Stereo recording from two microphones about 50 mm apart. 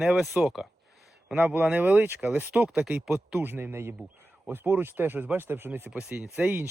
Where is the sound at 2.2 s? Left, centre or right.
Right.